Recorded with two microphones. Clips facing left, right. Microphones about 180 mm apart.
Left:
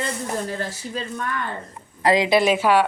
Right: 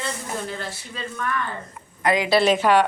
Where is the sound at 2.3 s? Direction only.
10° left (ahead or behind).